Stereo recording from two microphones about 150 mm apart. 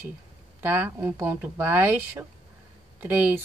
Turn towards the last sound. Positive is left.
turn(degrees=-10)  # may be behind; listen again after turning